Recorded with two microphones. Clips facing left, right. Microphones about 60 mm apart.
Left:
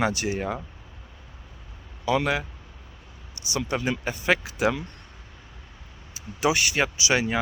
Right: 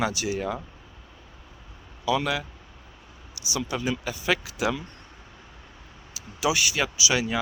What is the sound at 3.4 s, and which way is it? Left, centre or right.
Speech, left.